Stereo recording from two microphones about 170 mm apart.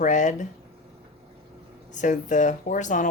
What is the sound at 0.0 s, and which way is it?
Speech, 45° left (ahead or behind).